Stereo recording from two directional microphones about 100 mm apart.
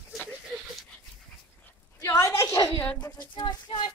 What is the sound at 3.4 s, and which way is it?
Speech, 50° left (ahead or behind).